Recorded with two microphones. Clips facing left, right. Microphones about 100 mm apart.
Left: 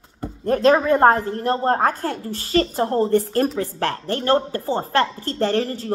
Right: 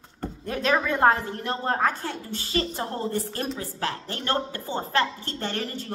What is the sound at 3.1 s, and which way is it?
A woman's voice, 50° left (ahead or behind).